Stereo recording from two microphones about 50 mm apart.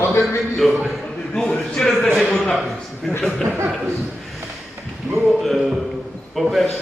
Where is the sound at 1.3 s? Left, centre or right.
Centre.